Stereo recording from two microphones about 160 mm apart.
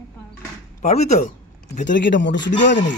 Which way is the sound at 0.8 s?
45° left (ahead or behind).